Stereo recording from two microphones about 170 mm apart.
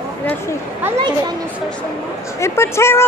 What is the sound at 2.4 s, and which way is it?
Speech, 15° left (ahead or behind).